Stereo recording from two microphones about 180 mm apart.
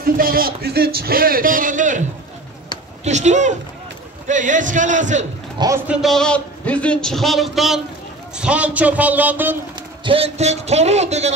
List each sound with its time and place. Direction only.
0.0 s a man's voice: 55° right (ahead or behind)
5.9 s a man's voice: centre (ahead or behind)
10.0 s speech: 35° right (ahead or behind)